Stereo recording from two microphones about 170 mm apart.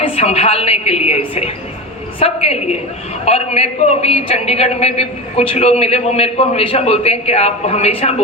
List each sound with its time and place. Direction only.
0.0 s a man's voice: 35° left (ahead or behind)